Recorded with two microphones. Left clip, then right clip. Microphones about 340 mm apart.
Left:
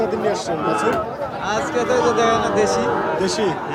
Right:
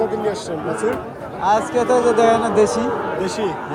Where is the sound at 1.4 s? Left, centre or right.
Centre.